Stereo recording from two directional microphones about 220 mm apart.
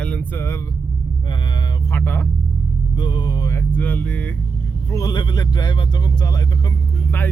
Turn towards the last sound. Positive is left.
turn(degrees=15)  # may be behind; listen again after turning